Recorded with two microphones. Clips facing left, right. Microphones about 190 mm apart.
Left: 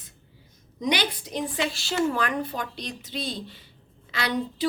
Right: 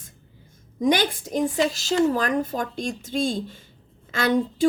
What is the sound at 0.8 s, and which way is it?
A woman's voice, 50° right (ahead or behind).